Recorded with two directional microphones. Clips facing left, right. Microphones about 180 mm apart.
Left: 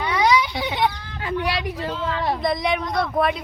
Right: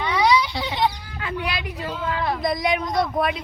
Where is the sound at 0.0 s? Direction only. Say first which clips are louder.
Even; centre (ahead or behind).